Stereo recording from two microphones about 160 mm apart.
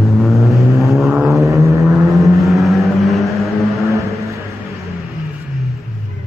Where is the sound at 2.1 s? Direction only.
Centre (ahead or behind).